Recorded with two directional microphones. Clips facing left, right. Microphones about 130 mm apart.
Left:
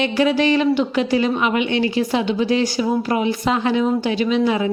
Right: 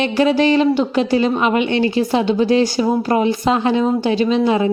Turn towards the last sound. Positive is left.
turn(degrees=-35)  # may be behind; listen again after turning